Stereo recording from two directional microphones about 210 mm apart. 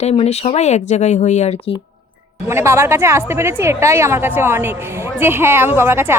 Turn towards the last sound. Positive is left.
turn(degrees=-10)  # may be behind; listen again after turning